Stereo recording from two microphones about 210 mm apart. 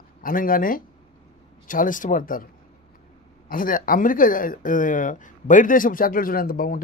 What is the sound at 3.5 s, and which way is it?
Speech, 40° left (ahead or behind).